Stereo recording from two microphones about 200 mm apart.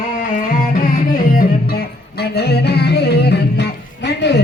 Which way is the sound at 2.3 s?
55° left (ahead or behind).